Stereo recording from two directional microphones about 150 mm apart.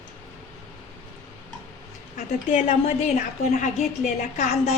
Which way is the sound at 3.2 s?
55° left (ahead or behind).